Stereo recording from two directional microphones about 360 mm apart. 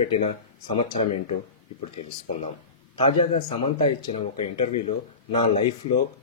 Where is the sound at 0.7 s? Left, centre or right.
Centre.